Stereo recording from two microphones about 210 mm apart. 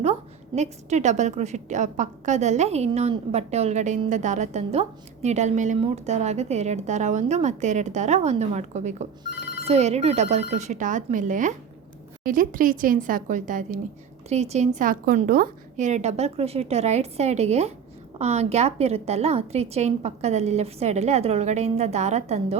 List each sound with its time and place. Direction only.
0.0 s a woman's voice: 30° right (ahead or behind)
14.8 s a woman's voice: 45° right (ahead or behind)